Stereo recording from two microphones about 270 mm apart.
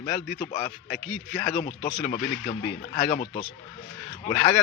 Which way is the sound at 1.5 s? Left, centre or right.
Left.